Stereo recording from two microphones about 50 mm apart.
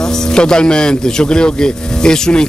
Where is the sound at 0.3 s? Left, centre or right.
Centre.